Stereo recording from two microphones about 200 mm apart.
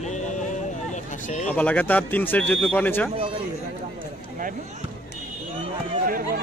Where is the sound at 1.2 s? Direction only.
35° left (ahead or behind).